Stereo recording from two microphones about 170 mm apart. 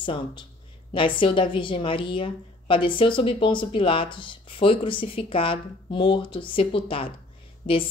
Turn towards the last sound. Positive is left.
turn(degrees=30)  # may be behind; listen again after turning